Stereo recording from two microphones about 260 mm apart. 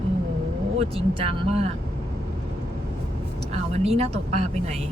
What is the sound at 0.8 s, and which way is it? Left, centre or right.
Speech, right.